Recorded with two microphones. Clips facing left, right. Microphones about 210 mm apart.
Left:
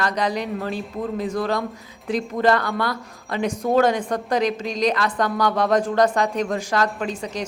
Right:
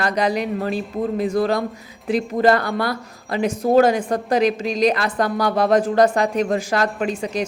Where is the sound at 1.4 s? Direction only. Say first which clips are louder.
Right 4 dB; 35° right (ahead or behind).